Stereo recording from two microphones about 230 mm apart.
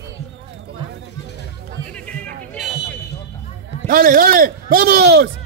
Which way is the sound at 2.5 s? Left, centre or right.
Centre.